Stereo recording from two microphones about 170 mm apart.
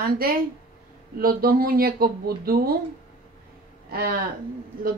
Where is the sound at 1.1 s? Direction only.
60° right (ahead or behind).